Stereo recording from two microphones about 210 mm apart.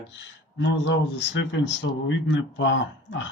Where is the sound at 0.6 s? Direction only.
60° left (ahead or behind).